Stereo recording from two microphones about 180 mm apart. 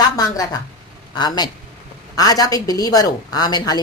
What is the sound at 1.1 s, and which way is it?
Speech, 25° left (ahead or behind).